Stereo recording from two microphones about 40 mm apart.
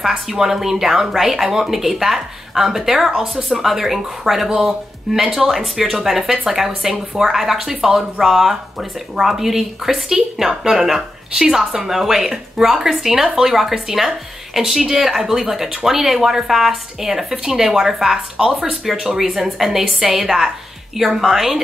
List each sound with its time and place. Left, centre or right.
0.0 s a woman's voice: centre